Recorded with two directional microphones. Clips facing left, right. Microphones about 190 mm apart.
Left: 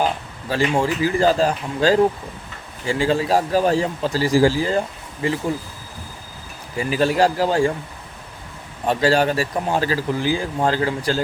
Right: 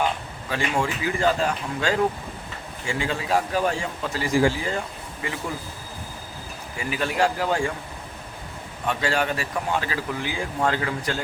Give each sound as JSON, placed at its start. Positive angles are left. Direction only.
{"t": 0.0, "sound": "speech", "side_deg": 35}
{"t": 6.7, "sound": "speech", "side_deg": 35}
{"t": 8.9, "sound": "speech", "side_deg": 35}